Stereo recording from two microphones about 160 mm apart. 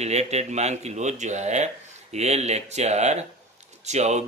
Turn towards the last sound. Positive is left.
turn(degrees=-45)  # may be behind; listen again after turning